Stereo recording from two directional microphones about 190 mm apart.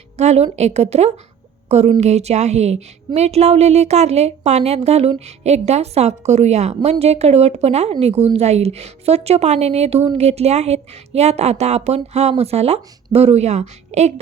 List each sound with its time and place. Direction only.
0.2 s speech: 35° right (ahead or behind)